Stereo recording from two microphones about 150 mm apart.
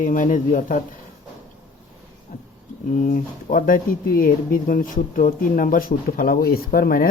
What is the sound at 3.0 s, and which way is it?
Speech, 60° left (ahead or behind).